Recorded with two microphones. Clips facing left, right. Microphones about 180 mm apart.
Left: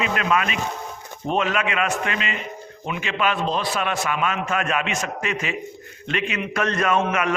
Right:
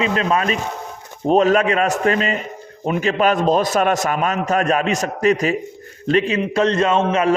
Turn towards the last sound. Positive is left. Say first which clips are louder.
# right 5 dB
turn(degrees=-30)  # may be behind; listen again after turning